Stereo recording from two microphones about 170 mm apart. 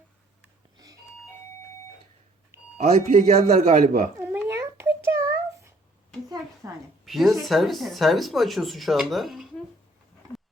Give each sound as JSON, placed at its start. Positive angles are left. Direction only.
{"t": 2.7, "sound": "speech", "side_deg": -40}
{"t": 4.2, "sound": "a sound", "side_deg": -10}
{"t": 7.0, "sound": "speech", "side_deg": 0}